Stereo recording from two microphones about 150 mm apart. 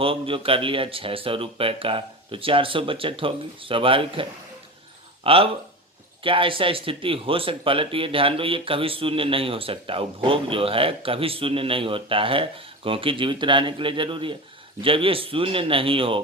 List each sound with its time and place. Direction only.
0.0 s speech: 35° right (ahead or behind)